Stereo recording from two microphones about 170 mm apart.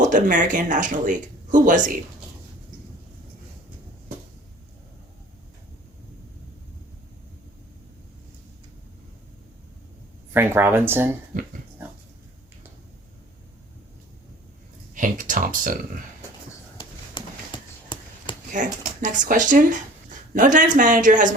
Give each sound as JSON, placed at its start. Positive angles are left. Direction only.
{"t": 0.0, "sound": "speech", "side_deg": -50}
{"t": 10.3, "sound": "speech", "side_deg": -15}
{"t": 14.9, "sound": "speech", "side_deg": -50}
{"t": 16.7, "sound": "a sound", "side_deg": 30}
{"t": 18.5, "sound": "speech", "side_deg": -45}